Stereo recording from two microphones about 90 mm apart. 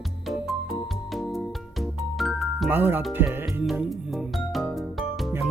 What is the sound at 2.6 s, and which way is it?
Speech, 20° right (ahead or behind).